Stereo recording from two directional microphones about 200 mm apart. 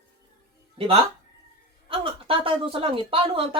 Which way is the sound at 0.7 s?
25° right (ahead or behind).